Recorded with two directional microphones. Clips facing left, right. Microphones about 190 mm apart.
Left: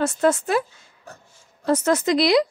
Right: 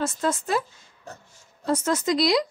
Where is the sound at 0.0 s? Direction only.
65° left (ahead or behind).